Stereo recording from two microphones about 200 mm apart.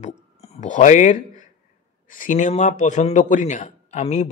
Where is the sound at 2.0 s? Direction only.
40° left (ahead or behind).